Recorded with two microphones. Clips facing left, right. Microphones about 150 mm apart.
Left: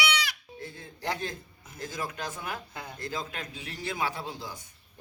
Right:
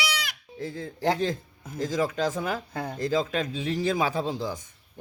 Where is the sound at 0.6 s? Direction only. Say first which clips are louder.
Right 9 dB; 90° right.